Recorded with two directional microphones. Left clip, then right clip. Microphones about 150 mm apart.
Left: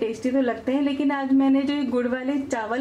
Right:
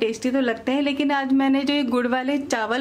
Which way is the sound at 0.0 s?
35° right (ahead or behind).